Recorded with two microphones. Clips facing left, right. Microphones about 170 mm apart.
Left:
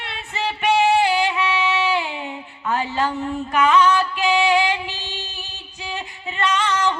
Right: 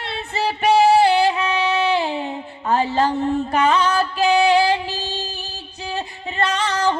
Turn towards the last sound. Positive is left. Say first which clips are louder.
# right 1 dB
turn(degrees=-35)  # may be behind; listen again after turning